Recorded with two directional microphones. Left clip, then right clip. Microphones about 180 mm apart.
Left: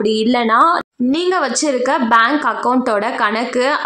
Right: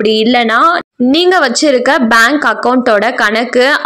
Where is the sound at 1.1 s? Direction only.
20° right (ahead or behind).